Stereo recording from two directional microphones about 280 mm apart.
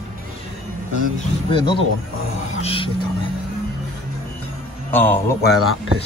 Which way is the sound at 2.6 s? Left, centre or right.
Left.